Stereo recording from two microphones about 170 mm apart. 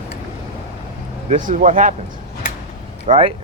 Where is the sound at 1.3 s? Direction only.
50° right (ahead or behind).